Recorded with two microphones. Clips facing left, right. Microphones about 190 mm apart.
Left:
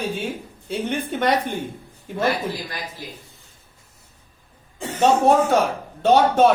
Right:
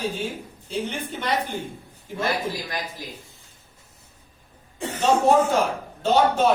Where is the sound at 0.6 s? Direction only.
60° left (ahead or behind).